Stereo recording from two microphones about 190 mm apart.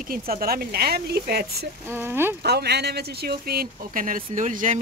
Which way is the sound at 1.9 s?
10° right (ahead or behind).